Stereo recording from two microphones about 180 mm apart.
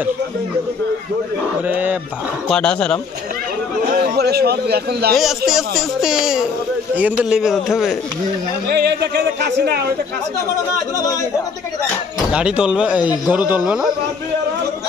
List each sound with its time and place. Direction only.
1.7 s speech: 10° right (ahead or behind)
2.4 s a man's voice: 5° left (ahead or behind)
3.9 s a man's voice: 60° right (ahead or behind)
5.5 s a man's voice: centre (ahead or behind)
8.6 s speech: 65° right (ahead or behind)
12.3 s speech: 5° right (ahead or behind)